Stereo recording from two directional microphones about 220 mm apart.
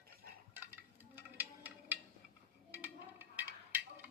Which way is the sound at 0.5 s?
10° right (ahead or behind).